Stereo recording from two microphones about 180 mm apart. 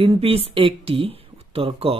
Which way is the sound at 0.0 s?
30° right (ahead or behind).